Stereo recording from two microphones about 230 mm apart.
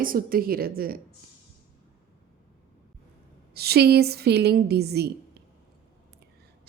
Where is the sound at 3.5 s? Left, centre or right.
Right.